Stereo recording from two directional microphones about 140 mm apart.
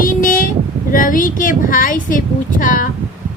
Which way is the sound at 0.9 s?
75° left (ahead or behind).